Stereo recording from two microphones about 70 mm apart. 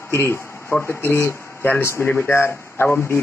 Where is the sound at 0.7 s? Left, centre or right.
Left.